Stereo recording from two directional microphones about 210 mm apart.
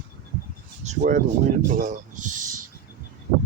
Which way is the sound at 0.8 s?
35° right (ahead or behind).